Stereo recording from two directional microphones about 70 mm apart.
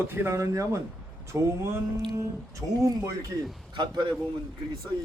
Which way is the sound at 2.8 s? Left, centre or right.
Right.